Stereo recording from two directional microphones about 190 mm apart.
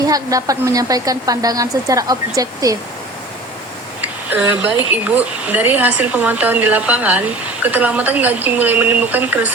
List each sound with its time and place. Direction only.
0.0 s a woman's voice: 20° right (ahead or behind)
4.0 s a sound: 10° right (ahead or behind)
5.1 s speech: 10° right (ahead or behind)